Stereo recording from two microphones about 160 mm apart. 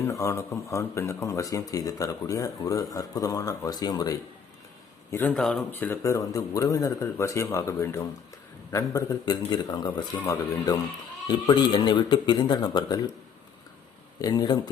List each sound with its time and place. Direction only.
0.1 s speech: 20° left (ahead or behind)
5.3 s speech: centre (ahead or behind)
5.7 s speech: 15° left (ahead or behind)
14.2 s speech: 25° left (ahead or behind)